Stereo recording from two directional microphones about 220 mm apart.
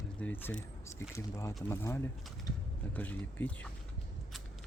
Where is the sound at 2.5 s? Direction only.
15° left (ahead or behind).